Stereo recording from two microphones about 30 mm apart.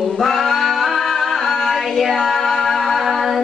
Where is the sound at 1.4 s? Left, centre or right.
Centre.